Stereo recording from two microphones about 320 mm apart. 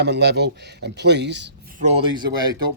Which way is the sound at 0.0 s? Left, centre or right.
Right.